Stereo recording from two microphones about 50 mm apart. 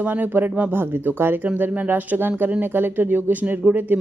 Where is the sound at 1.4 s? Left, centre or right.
Right.